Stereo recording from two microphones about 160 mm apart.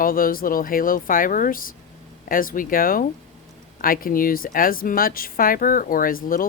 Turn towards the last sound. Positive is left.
turn(degrees=60)  # may be behind; listen again after turning